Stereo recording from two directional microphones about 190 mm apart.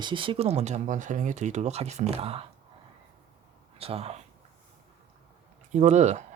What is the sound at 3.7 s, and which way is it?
Speech, 30° right (ahead or behind).